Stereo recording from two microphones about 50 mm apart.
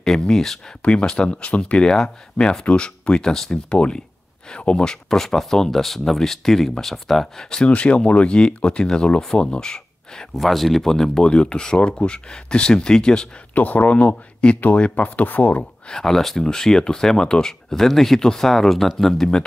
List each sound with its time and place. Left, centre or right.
0.0 s speech: centre
7.7 s speech: left
10.3 s speech: centre
13.6 s speech: left
15.9 s speech: centre